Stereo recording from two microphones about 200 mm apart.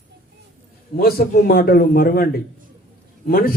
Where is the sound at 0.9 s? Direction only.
50° left (ahead or behind).